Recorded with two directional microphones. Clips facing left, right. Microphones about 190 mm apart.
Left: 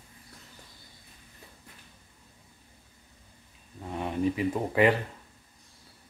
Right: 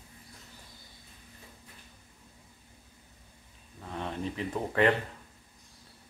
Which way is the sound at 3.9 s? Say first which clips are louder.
Left 7 dB; 10° left (ahead or behind).